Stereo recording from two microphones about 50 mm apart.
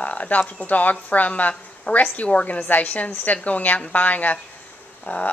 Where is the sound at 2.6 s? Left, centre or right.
Left.